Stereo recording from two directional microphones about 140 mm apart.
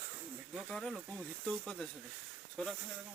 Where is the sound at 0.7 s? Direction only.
Centre (ahead or behind).